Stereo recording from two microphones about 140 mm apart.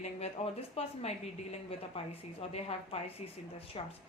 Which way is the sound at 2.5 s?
45° left (ahead or behind).